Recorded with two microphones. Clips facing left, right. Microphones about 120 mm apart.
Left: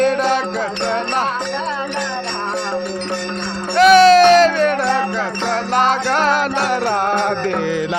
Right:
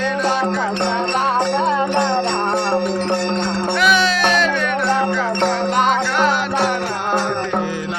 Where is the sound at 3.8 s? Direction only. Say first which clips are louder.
Left 11 dB; 40° left (ahead or behind).